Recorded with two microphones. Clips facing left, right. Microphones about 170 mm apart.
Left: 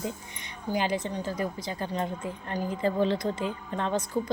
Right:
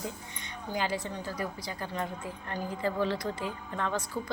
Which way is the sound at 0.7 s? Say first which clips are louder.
Left 4 dB; 20° left (ahead or behind).